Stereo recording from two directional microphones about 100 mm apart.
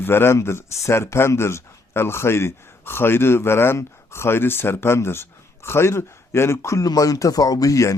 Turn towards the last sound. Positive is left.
turn(degrees=35)  # may be behind; listen again after turning